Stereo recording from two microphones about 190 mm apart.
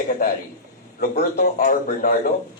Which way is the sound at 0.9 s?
55° left (ahead or behind).